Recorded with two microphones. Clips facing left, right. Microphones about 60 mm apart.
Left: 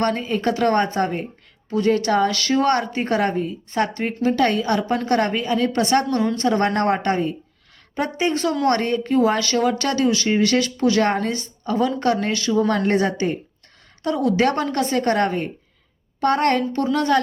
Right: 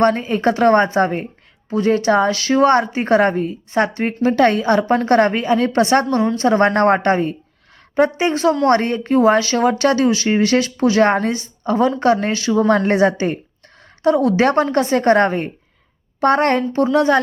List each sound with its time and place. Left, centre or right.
0.0 s a woman's voice: right
3.7 s a woman's voice: right
4.0 s a woman's voice: right